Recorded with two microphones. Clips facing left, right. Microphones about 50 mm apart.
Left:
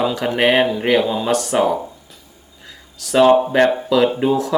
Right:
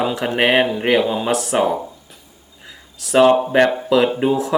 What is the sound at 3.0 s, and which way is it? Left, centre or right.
Speech, centre.